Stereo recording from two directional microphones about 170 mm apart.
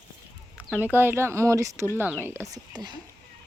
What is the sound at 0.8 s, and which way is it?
Speech, 10° right (ahead or behind).